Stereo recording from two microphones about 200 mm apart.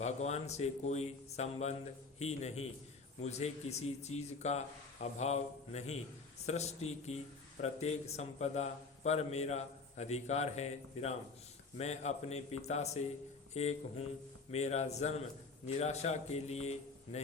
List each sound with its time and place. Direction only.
0.0 s a man's voice: 35° left (ahead or behind)